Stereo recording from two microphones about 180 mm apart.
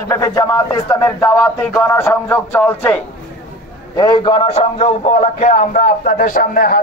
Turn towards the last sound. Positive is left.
turn(degrees=50)  # may be behind; listen again after turning